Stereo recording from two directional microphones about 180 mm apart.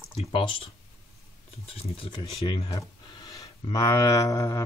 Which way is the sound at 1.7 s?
30° left (ahead or behind).